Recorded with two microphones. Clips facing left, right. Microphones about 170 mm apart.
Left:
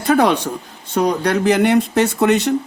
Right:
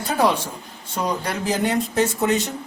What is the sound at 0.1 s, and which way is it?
Speech, 70° left (ahead or behind).